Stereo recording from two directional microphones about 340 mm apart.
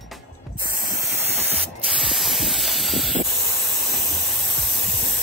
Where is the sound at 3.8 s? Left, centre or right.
Centre.